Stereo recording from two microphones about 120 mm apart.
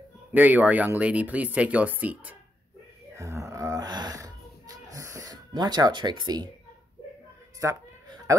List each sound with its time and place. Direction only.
0.3 s speech: 15° right (ahead or behind)
3.2 s a sound: 25° right (ahead or behind)
7.6 s speech: 25° right (ahead or behind)